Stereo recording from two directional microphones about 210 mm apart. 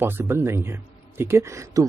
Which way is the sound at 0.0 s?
10° right (ahead or behind).